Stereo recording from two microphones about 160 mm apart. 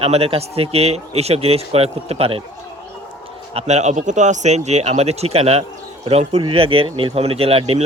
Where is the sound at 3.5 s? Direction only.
40° right (ahead or behind).